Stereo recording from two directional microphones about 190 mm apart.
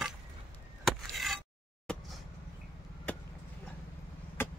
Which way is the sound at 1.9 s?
5° left (ahead or behind).